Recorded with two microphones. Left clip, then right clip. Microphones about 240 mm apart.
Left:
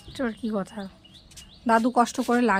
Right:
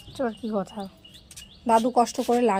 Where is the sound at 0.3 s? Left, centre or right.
Left.